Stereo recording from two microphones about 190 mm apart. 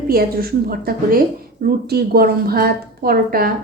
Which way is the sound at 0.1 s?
50° right (ahead or behind).